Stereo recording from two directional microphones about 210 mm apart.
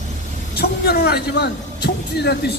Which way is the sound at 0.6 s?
50° left (ahead or behind).